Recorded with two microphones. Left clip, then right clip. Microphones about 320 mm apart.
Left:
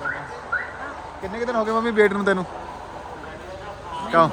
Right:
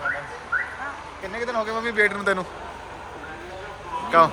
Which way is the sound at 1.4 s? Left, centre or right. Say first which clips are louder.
Left 4 dB; centre.